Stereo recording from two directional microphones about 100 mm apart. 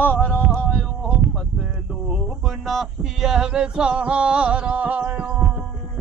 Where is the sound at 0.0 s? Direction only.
15° left (ahead or behind).